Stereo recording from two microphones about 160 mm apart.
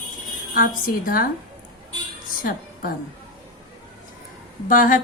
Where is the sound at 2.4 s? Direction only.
60° left (ahead or behind).